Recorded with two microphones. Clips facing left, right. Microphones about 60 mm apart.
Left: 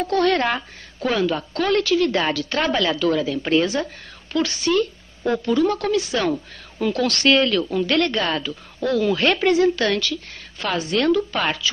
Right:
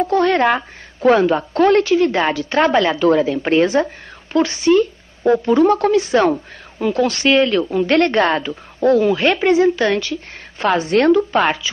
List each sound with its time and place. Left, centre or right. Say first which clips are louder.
0.0 s a woman's voice: right 4 dB; centre
0.6 s a woman's voice: right 5 dB; right
6.8 s a woman's voice: right 4 dB; centre
9.1 s a woman's voice: right 3 dB; centre